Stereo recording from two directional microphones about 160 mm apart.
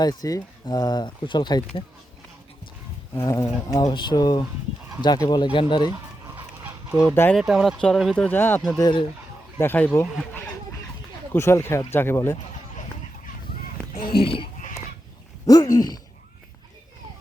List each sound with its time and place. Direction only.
0.0 s speech: 25° left (ahead or behind)
3.2 s speech: 20° left (ahead or behind)
7.1 s speech: 15° left (ahead or behind)
7.3 s speech: centre (ahead or behind)
8.8 s speech: 30° left (ahead or behind)
9.6 s speech: 10° left (ahead or behind)
11.3 s speech: 15° left (ahead or behind)
13.9 s speech: 35° left (ahead or behind)
15.4 s speech: 20° left (ahead or behind)